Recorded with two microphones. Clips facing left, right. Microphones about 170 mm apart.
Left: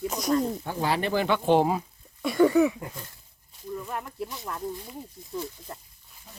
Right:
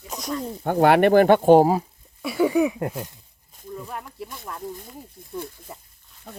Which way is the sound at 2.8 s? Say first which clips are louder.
Right 11 dB; 65° right (ahead or behind).